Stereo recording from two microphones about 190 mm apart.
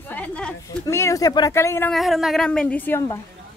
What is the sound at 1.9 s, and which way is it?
A woman's voice, centre (ahead or behind).